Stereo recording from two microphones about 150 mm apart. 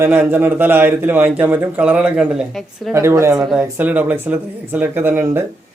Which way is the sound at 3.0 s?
20° right (ahead or behind).